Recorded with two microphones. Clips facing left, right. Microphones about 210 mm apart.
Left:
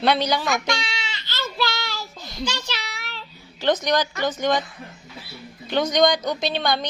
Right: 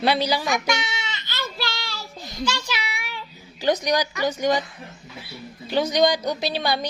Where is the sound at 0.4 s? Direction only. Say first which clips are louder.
Even; 20° right (ahead or behind).